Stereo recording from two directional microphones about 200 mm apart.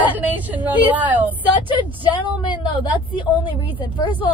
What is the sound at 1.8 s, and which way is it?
A woman's voice, 25° left (ahead or behind).